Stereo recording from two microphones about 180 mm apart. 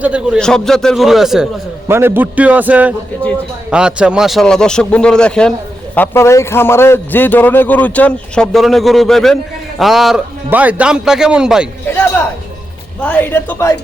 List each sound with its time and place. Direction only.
0.0 s a man's voice: 5° right (ahead or behind)
0.3 s a man's voice: 5° left (ahead or behind)
1.9 s a man's voice: 15° right (ahead or behind)
13.0 s a woman's voice: 10° left (ahead or behind)